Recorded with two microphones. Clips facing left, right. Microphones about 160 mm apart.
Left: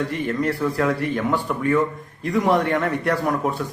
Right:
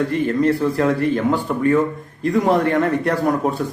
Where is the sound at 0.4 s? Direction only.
30° right (ahead or behind).